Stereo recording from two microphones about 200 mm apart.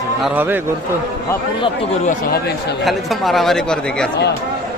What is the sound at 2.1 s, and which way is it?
Speech, 50° left (ahead or behind).